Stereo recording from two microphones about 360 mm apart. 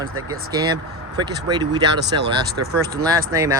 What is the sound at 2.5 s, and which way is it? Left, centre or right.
Speech, right.